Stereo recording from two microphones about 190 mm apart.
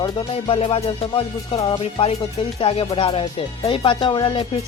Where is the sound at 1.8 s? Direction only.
30° left (ahead or behind).